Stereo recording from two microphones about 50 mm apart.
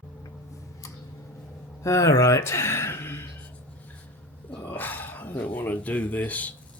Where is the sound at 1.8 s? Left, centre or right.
Left.